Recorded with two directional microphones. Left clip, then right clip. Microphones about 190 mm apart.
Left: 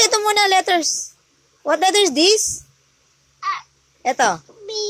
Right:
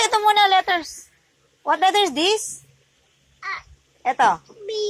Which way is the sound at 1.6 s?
35° left (ahead or behind).